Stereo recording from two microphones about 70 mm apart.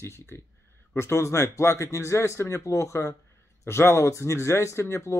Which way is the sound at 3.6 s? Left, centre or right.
Left.